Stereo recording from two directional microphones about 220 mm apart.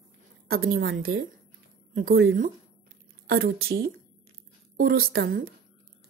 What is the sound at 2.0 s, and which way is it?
Speech, 40° right (ahead or behind).